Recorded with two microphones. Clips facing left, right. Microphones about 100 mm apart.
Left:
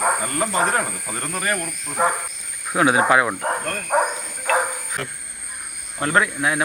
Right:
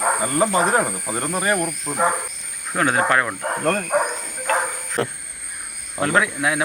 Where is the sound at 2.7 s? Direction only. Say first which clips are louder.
Left 2 dB; 5° left (ahead or behind).